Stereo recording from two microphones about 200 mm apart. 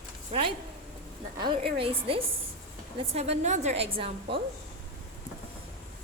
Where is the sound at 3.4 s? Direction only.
35° right (ahead or behind).